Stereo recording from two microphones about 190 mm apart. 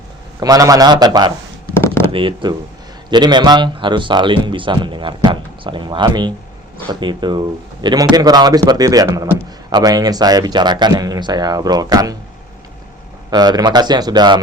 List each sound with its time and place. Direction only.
0.3 s speech: 20° right (ahead or behind)
13.3 s speech: 20° right (ahead or behind)